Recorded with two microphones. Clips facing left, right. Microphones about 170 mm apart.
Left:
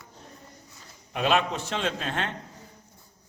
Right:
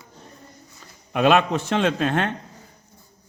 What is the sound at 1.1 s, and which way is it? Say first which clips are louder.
A man's voice: right 7 dB; 60° right (ahead or behind).